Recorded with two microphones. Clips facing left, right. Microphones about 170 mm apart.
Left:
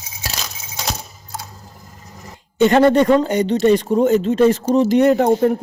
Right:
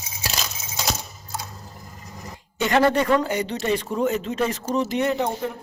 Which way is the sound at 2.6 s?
30° left (ahead or behind).